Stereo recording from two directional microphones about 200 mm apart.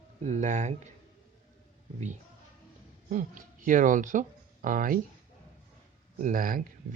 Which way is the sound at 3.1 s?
40° right (ahead or behind).